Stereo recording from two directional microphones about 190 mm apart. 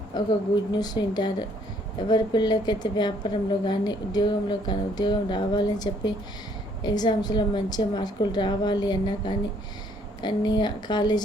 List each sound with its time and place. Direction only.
0.1 s a woman's voice: 20° left (ahead or behind)